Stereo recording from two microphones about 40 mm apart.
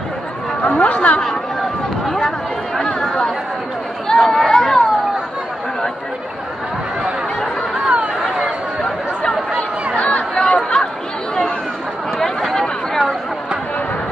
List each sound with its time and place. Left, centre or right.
0.7 s chatter: left
2.0 s chatter: centre
4.1 s chatter: centre
9.9 s chatter: left
12.2 s a sound: centre